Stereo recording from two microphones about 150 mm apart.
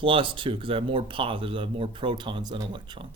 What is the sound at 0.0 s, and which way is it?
Speech, 35° right (ahead or behind).